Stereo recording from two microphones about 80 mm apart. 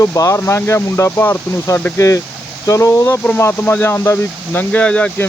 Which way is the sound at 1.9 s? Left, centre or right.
Left.